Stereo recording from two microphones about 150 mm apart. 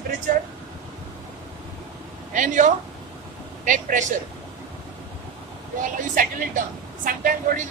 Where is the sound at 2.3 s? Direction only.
60° right (ahead or behind).